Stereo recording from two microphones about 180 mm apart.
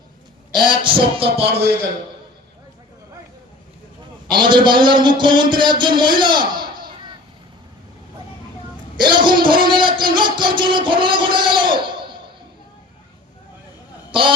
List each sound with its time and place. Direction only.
0.5 s a man's voice: 25° right (ahead or behind)
4.3 s a man's voice: 25° right (ahead or behind)
9.0 s a man's voice: 25° right (ahead or behind)
14.1 s a man's voice: 30° right (ahead or behind)